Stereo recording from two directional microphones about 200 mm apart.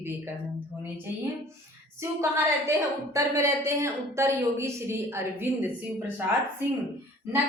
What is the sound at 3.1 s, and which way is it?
A woman's voice, 15° right (ahead or behind).